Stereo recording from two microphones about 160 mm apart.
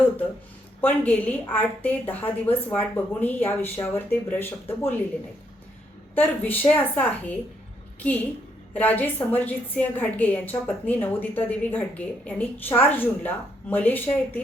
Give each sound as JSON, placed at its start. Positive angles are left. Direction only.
{"t": 0.8, "sound": "a woman's voice", "side_deg": 10}
{"t": 6.1, "sound": "a woman's voice", "side_deg": 10}